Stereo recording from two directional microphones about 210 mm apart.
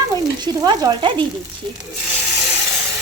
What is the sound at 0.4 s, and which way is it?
Speech, 20° right (ahead or behind).